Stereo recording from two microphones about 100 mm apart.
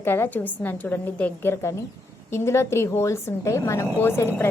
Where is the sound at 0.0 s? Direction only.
20° left (ahead or behind).